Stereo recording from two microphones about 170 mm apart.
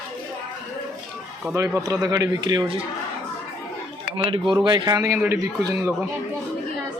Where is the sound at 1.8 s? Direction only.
20° right (ahead or behind).